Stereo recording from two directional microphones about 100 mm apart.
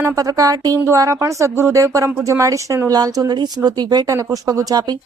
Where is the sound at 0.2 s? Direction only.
35° right (ahead or behind).